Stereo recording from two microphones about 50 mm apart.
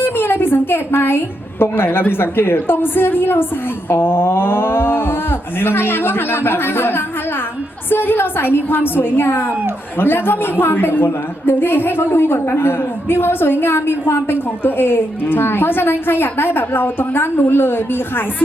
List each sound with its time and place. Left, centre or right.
0.0 s a woman's voice: left